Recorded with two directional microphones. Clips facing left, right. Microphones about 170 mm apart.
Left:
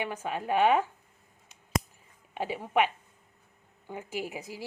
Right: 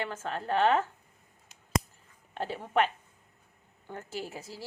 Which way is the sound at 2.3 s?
10° left (ahead or behind).